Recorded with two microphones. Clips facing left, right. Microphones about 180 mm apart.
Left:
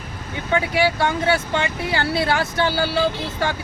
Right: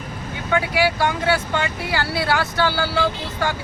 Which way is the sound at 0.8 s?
25° left (ahead or behind).